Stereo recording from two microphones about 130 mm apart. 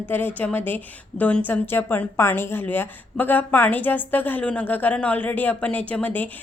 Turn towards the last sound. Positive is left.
turn(degrees=15)  # may be behind; listen again after turning